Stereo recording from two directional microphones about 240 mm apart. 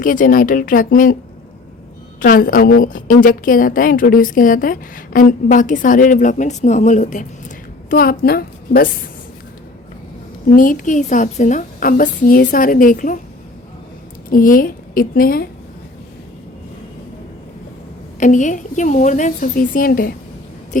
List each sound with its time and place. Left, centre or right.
0.0 s a woman's voice: left
2.2 s a woman's voice: left
10.4 s a woman's voice: left
14.3 s a woman's voice: left
18.2 s a woman's voice: left